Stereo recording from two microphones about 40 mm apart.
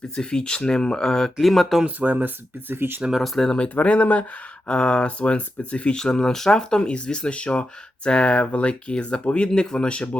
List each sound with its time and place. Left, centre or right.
0.2 s speech: centre
1.1 s speech: centre
2.0 s speech: right
3.2 s speech: centre
3.6 s speech: left
4.7 s speech: left
6.0 s speech: centre